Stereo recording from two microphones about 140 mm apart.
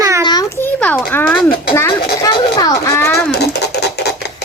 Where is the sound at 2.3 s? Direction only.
35° left (ahead or behind).